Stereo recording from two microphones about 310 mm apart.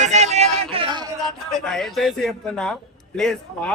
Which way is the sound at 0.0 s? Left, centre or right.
Right.